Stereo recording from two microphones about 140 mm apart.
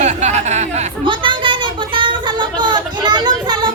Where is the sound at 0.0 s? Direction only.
55° right (ahead or behind).